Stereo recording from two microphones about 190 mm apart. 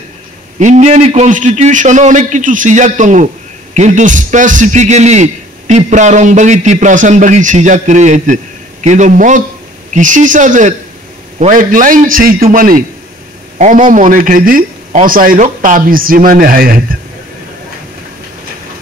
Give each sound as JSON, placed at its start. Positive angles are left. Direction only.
{"t": 0.6, "sound": "a man's voice", "side_deg": -40}